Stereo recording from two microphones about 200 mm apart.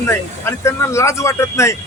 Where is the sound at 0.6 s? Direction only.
15° left (ahead or behind).